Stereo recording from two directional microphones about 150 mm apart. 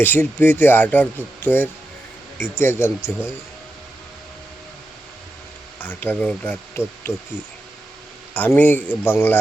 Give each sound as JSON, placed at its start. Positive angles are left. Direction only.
{"t": 0.0, "sound": "speech", "side_deg": 15}
{"t": 5.8, "sound": "speech", "side_deg": 10}
{"t": 8.3, "sound": "speech", "side_deg": 10}